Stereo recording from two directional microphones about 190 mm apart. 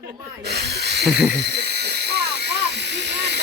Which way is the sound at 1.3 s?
60° right (ahead or behind).